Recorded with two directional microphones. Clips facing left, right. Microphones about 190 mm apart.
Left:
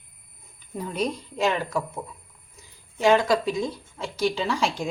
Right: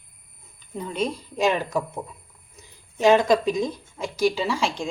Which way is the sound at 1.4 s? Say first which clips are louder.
Right 2 dB; 15° right (ahead or behind).